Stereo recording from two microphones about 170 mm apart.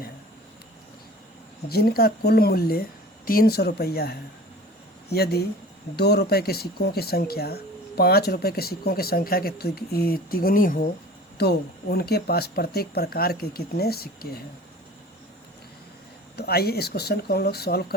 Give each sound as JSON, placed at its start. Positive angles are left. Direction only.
{"t": 1.7, "sound": "speech", "side_deg": 60}
{"t": 11.3, "sound": "speech", "side_deg": 70}
{"t": 16.3, "sound": "speech", "side_deg": 70}